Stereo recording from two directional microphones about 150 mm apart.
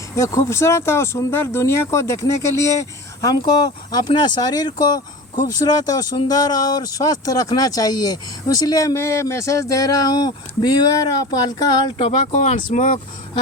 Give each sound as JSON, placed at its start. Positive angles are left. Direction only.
{"t": 0.2, "sound": "speech", "side_deg": 20}
{"t": 12.3, "sound": "speech", "side_deg": 55}